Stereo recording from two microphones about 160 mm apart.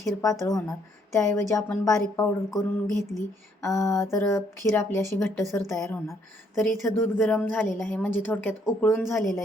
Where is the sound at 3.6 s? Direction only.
20° left (ahead or behind).